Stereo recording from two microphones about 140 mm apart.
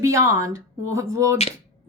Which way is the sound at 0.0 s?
20° right (ahead or behind).